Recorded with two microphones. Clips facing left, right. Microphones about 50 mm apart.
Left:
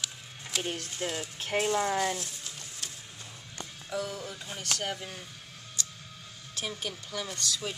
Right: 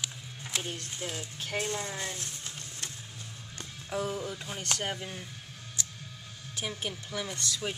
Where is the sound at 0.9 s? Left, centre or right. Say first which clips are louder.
Left 3 dB; left.